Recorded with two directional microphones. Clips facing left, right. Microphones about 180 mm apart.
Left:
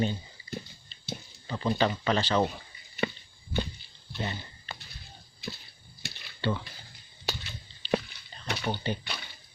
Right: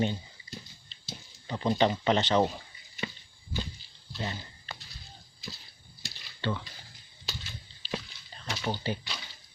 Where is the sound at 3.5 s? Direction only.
65° left (ahead or behind).